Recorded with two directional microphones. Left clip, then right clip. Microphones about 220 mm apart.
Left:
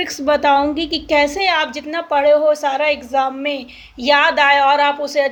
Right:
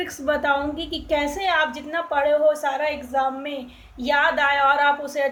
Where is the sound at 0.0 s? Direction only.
45° left (ahead or behind).